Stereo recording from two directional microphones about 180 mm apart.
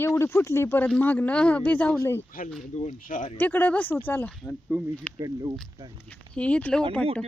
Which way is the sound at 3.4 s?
10° left (ahead or behind).